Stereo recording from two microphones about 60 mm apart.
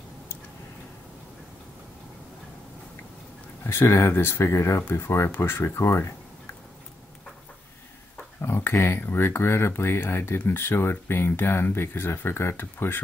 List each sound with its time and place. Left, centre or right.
3.6 s speech: left
8.4 s speech: left